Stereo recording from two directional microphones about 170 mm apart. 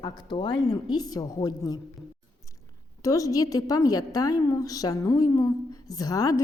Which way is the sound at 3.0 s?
20° left (ahead or behind).